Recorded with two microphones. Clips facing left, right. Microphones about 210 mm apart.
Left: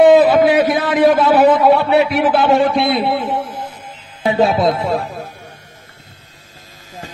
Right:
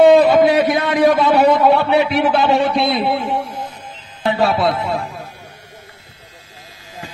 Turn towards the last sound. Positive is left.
turn(degrees=40)  # may be behind; listen again after turning